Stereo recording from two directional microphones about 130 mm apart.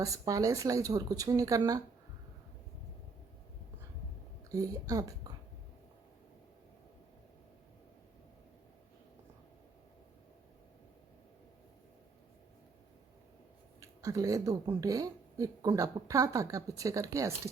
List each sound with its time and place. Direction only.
0.0 s speech: 25° right (ahead or behind)
4.5 s speech: 25° right (ahead or behind)
13.7 s speech: 25° right (ahead or behind)